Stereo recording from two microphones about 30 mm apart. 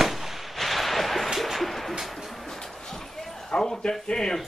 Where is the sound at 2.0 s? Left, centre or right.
Centre.